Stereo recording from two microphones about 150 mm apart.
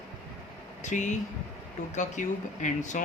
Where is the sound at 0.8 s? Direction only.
55° left (ahead or behind).